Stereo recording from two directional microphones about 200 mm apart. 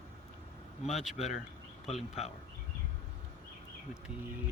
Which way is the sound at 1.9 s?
30° left (ahead or behind).